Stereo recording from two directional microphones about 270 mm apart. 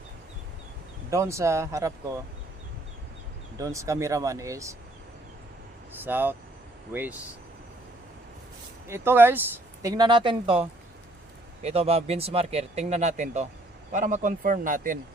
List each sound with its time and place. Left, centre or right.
1.1 s speech: centre
3.6 s speech: centre
6.0 s speech: centre
8.9 s speech: centre; by 14.9 s right